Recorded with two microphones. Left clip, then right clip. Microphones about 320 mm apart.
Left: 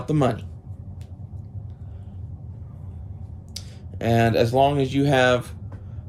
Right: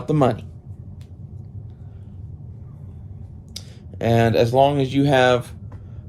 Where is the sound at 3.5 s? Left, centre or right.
Centre.